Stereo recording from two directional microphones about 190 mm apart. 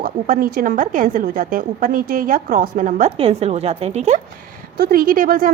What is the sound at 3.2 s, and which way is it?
Speech, 30° right (ahead or behind).